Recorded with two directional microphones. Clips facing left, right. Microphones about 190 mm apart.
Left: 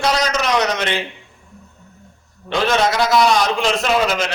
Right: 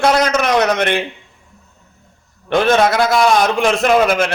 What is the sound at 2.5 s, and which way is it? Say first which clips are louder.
A man's voice: right 4 dB; 55° right (ahead or behind).